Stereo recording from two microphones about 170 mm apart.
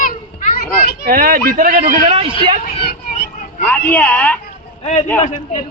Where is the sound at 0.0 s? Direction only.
50° left (ahead or behind).